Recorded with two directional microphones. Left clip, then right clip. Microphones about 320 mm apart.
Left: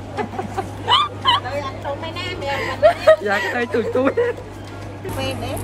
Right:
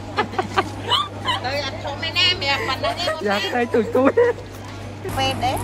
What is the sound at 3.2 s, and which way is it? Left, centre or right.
Speech, centre.